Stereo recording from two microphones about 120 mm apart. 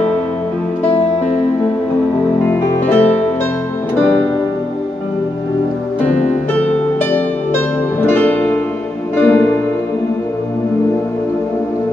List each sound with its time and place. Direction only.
2.4 s music: 15° left (ahead or behind)
6.0 s music: 10° left (ahead or behind)